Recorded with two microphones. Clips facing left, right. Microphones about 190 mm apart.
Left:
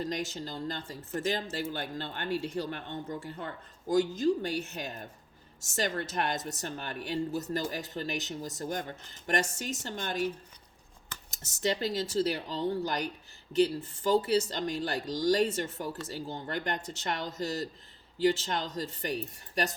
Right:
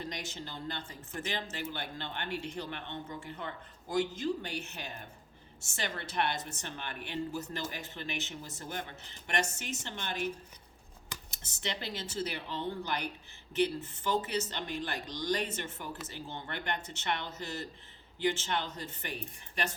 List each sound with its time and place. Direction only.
0.0 s a woman's voice: 40° left (ahead or behind)
11.3 s a woman's voice: 40° left (ahead or behind)